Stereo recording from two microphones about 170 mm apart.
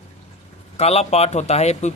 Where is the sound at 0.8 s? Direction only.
40° left (ahead or behind).